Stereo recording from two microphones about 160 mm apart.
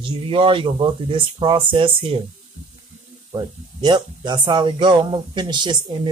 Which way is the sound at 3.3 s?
25° right (ahead or behind).